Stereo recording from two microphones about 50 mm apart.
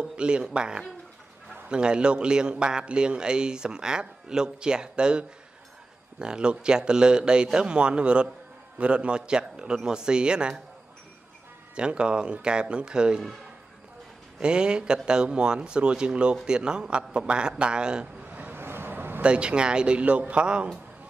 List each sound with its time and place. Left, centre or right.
0.0 s a man's voice: centre
11.7 s speech: centre
14.4 s a man's voice: centre
18.5 s vehicle: right
19.2 s speech: right